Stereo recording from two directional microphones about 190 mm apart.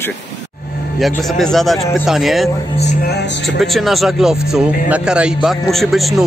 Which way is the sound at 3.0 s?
65° left (ahead or behind).